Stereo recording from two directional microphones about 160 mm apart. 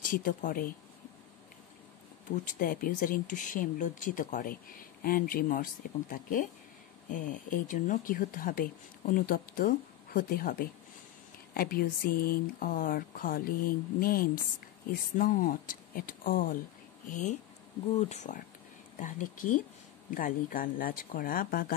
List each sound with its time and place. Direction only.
0.1 s speech: 60° left (ahead or behind)
2.3 s speech: 60° left (ahead or behind)